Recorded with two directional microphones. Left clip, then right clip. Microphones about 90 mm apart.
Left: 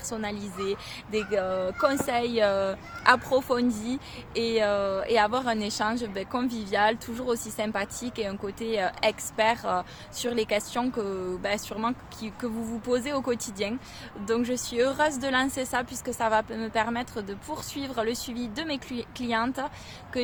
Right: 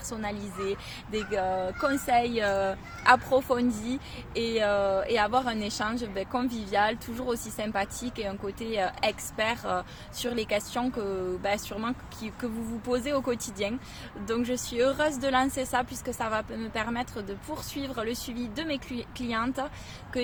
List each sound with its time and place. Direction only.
0.1 s speech: 35° left (ahead or behind)